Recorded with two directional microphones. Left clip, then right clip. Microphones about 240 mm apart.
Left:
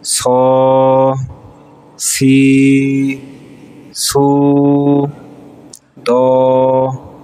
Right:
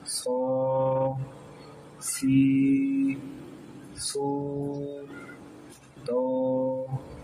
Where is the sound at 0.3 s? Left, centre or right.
Left.